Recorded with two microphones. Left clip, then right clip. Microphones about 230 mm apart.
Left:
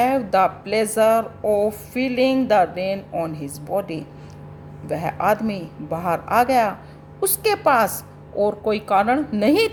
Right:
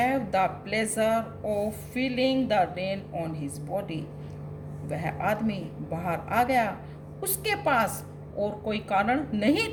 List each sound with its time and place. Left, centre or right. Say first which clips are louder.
0.0 s speech: left 7 dB; left